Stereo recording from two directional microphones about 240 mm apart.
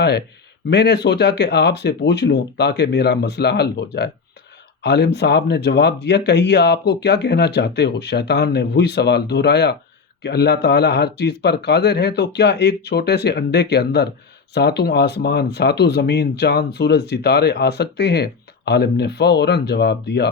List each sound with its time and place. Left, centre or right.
0.7 s speech: left